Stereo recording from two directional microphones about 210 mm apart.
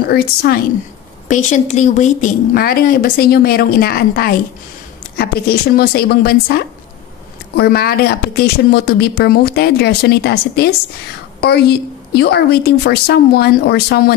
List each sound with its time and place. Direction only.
0.1 s speech: 50° left (ahead or behind)
1.3 s a woman's voice: 35° left (ahead or behind)
2.5 s speech: 45° left (ahead or behind)